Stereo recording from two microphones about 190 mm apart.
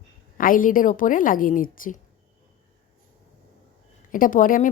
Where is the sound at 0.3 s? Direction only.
45° left (ahead or behind).